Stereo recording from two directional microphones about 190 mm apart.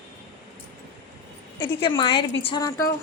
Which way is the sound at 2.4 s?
20° left (ahead or behind).